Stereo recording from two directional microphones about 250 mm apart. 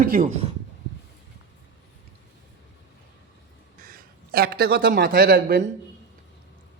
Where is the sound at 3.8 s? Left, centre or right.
Right.